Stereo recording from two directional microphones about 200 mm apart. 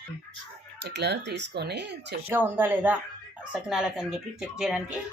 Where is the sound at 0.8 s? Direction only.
60° right (ahead or behind).